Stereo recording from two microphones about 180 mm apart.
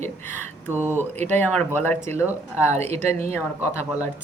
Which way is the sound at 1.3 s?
10° left (ahead or behind).